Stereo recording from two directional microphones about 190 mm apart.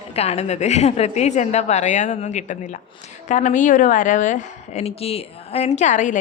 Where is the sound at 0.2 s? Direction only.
35° left (ahead or behind).